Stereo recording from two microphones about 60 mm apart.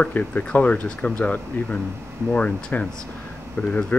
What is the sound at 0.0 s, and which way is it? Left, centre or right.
Speech, left.